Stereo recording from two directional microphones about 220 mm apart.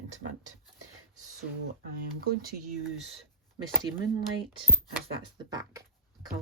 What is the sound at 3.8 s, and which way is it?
Speech, 20° right (ahead or behind).